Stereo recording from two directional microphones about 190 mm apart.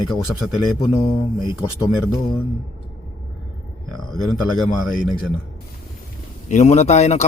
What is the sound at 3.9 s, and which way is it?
A man's voice, centre (ahead or behind).